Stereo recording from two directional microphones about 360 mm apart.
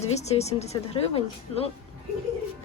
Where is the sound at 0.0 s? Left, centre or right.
Centre.